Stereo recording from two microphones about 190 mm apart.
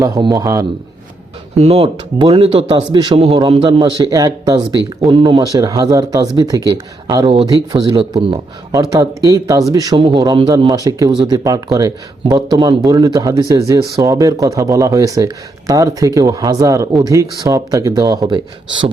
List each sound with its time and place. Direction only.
0.0 s speech: 20° right (ahead or behind)
1.5 s speech: 30° right (ahead or behind)